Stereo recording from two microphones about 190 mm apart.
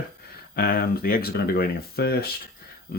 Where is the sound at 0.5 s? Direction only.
55° left (ahead or behind).